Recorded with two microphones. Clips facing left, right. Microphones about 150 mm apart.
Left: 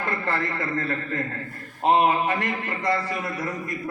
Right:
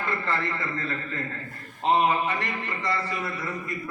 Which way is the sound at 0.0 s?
45° left (ahead or behind).